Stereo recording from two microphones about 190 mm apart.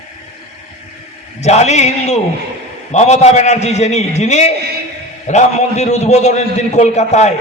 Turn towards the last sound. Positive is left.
turn(degrees=35)  # may be behind; listen again after turning